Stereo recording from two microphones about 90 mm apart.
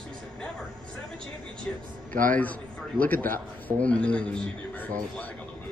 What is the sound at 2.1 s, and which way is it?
A man's voice, 15° left (ahead or behind).